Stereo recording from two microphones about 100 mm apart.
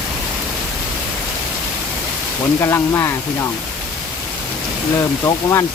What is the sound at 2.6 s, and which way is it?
Speech, 25° left (ahead or behind).